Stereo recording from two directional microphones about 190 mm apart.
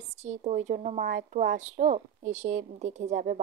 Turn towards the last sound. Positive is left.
turn(degrees=-40)  # may be behind; listen again after turning